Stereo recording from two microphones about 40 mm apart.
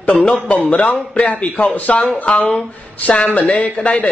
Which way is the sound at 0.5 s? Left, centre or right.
Left.